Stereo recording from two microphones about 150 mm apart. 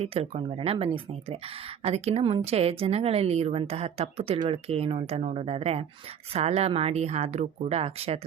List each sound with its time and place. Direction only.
0.0 s speech: 45° right (ahead or behind)